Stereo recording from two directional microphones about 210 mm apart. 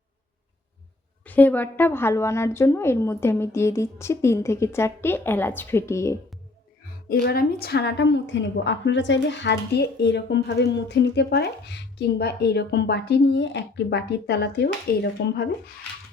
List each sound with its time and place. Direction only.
1.2 s a woman's voice: 10° left (ahead or behind)
7.1 s a woman's voice: 45° left (ahead or behind)